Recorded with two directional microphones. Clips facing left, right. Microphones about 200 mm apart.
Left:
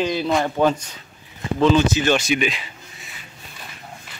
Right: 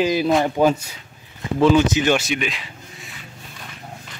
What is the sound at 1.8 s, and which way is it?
Speech, 20° right (ahead or behind).